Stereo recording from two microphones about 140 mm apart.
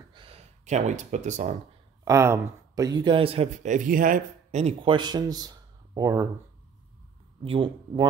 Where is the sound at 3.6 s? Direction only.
70° right (ahead or behind).